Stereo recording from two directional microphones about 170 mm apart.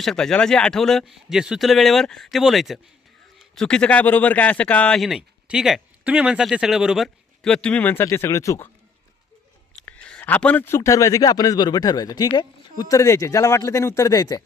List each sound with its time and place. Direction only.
0.0 s speech: centre (ahead or behind)
9.8 s a man's voice: 10° left (ahead or behind)